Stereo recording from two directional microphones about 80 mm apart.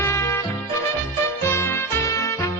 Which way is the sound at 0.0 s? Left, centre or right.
Left.